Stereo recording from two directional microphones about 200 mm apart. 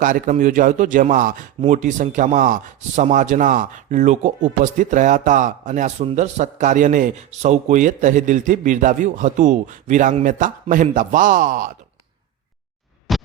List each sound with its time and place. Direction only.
0.0 s a man's voice: 40° right (ahead or behind)
13.1 s music: centre (ahead or behind)